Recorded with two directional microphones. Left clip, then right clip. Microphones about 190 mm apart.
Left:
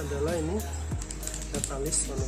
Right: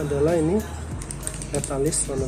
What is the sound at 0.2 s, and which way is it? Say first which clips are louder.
Speech: right 10 dB; centre (ahead or behind).